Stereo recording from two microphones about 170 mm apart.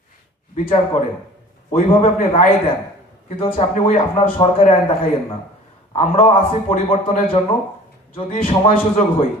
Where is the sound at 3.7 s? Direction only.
50° left (ahead or behind).